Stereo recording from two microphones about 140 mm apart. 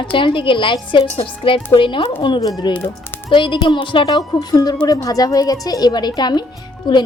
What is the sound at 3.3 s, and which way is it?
Speech, 35° left (ahead or behind).